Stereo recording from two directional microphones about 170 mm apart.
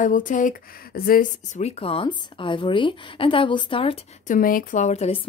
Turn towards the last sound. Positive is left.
turn(degrees=40)  # may be behind; listen again after turning